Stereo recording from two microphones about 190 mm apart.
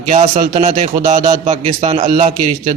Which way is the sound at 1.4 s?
35° right (ahead or behind).